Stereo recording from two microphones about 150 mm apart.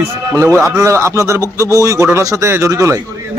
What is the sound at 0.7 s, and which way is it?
Speech, 20° right (ahead or behind).